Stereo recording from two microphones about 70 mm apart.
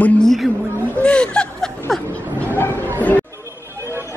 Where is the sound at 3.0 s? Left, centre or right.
Left.